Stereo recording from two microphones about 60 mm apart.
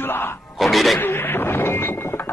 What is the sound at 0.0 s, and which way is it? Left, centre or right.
Music, left.